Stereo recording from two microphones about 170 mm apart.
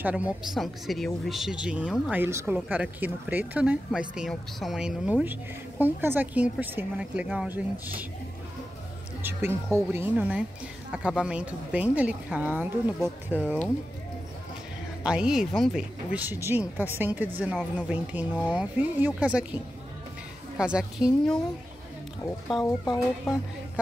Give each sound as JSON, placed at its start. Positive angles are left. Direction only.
{"t": 0.0, "sound": "speech", "side_deg": -5}
{"t": 9.2, "sound": "speech", "side_deg": -15}
{"t": 13.0, "sound": "speech", "side_deg": 10}
{"t": 15.0, "sound": "speech", "side_deg": -5}
{"t": 22.6, "sound": "speech", "side_deg": 25}